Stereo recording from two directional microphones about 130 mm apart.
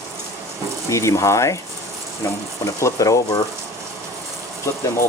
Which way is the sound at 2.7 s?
25° left (ahead or behind).